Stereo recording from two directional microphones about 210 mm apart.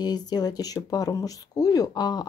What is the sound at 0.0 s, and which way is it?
Speech, 20° left (ahead or behind).